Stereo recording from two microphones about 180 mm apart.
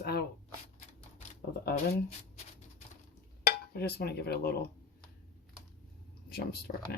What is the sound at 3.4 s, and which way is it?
Speech, 60° left (ahead or behind).